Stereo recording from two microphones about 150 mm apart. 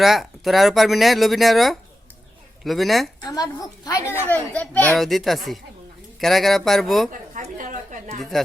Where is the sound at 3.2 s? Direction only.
25° left (ahead or behind).